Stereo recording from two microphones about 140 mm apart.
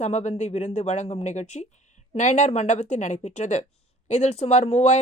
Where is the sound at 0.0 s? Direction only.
55° left (ahead or behind).